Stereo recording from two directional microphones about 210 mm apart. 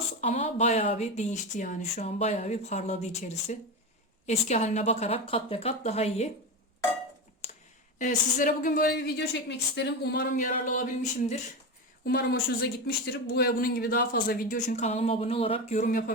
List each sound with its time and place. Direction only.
0.2 s speech: 30° left (ahead or behind)
7.9 s a woman's voice: 40° left (ahead or behind)
12.0 s speech: 50° left (ahead or behind)